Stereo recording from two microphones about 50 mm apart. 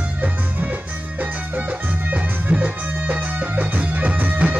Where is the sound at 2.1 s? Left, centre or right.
Right.